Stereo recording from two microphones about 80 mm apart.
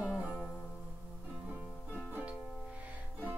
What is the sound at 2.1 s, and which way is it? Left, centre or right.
Music, centre.